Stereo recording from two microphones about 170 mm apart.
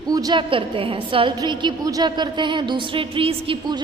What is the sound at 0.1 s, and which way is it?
A woman's voice, 25° right (ahead or behind).